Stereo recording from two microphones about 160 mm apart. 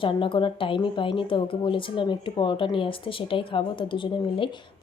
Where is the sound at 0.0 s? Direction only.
30° left (ahead or behind).